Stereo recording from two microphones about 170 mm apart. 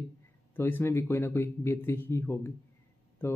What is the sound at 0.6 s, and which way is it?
A man's voice, 15° left (ahead or behind).